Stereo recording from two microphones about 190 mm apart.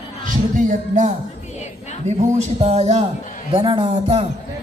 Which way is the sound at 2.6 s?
35° right (ahead or behind).